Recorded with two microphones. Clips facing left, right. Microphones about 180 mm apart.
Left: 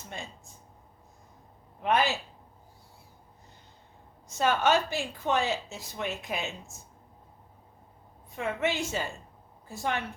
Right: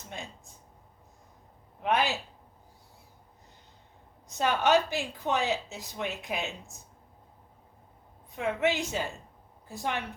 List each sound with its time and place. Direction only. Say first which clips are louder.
1.8 s a woman's voice: left 1 dB; 15° right (ahead or behind)
4.3 s a woman's voice: even; 15° right (ahead or behind)
8.4 s a woman's voice: right 2 dB; 15° right (ahead or behind)